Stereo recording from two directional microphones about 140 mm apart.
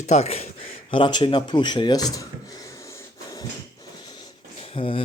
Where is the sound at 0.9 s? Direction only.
35° left (ahead or behind).